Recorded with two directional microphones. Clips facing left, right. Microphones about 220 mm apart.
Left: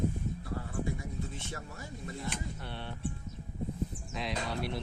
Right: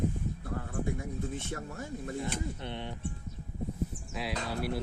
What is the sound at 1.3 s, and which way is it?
Speech, 50° right (ahead or behind).